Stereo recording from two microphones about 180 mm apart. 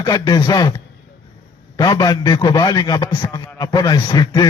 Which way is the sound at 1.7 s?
25° left (ahead or behind).